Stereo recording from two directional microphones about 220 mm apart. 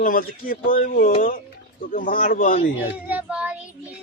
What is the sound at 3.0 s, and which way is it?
Speech, 5° right (ahead or behind).